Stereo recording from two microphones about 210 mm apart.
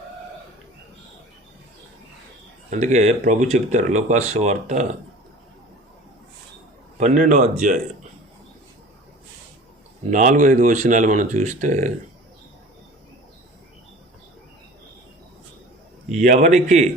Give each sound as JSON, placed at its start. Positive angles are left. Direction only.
{"t": 2.6, "sound": "speech", "side_deg": -35}
{"t": 7.0, "sound": "speech", "side_deg": -40}
{"t": 10.1, "sound": "speech", "side_deg": -35}
{"t": 16.0, "sound": "speech", "side_deg": -35}